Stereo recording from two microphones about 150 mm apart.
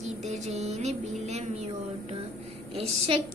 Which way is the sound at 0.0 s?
50° right (ahead or behind).